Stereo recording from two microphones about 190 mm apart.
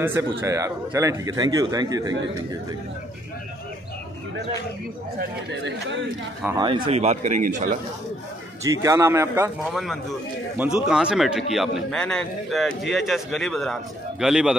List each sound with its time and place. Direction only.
0.0 s a man's voice: 10° right (ahead or behind)
5.5 s speech: 70° right (ahead or behind)
6.4 s a man's voice: 20° right (ahead or behind)
6.9 s a man's voice: 35° right (ahead or behind)
8.6 s a man's voice: 15° right (ahead or behind)
9.7 s a man's voice: centre (ahead or behind)